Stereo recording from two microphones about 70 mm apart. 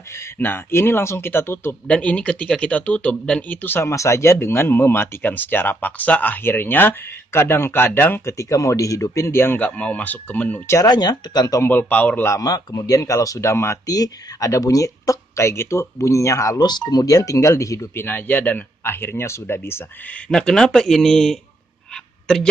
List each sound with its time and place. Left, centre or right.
0.4 s speech: left
1.9 s speech: centre
3.8 s speech: left
8.3 s speech: left
9.6 s speech: centre
10.9 s speech: left
11.6 s speech: left
12.4 s speech: left
13.8 s speech: left
16.6 s speech: left
17.9 s speech: left
20.2 s speech: centre